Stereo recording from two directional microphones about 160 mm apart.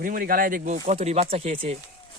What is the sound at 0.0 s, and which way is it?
Speech, 60° right (ahead or behind).